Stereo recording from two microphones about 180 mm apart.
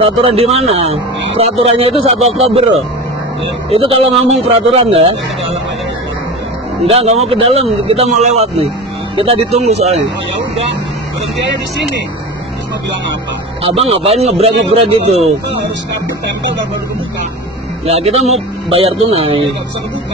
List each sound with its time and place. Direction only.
0.0 s speech: 35° right (ahead or behind)
3.7 s speech: 30° right (ahead or behind)
6.9 s speech: 35° right (ahead or behind)
13.6 s speech: 35° right (ahead or behind)
17.8 s speech: 35° right (ahead or behind)